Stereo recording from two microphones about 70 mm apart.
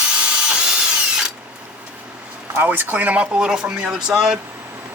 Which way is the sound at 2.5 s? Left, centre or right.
Right.